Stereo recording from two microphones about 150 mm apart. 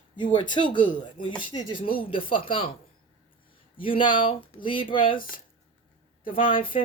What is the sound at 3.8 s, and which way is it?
A woman's voice, 35° left (ahead or behind).